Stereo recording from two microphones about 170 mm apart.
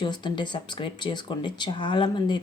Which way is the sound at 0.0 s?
25° left (ahead or behind).